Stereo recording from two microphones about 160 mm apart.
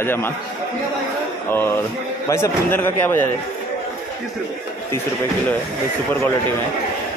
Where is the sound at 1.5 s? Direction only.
15° left (ahead or behind).